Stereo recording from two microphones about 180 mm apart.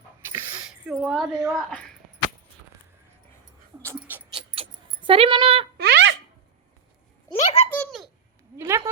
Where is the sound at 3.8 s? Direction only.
10° right (ahead or behind).